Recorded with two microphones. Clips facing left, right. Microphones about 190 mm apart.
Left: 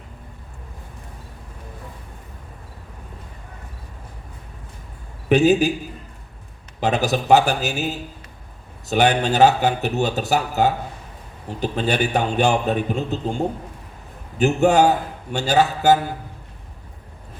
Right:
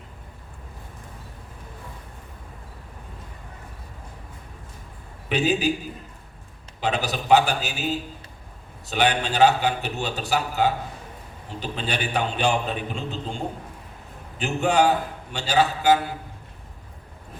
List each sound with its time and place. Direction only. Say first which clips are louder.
5.3 s speech: left 7 dB; 45° left (ahead or behind)
6.7 s speech: left 6 dB; 45° left (ahead or behind)
8.9 s speech: left 5 dB; 45° left (ahead or behind)
14.3 s speech: left 6 dB; 45° left (ahead or behind)